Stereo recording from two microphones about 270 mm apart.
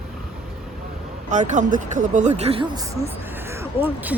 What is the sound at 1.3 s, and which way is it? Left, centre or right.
Speech, right.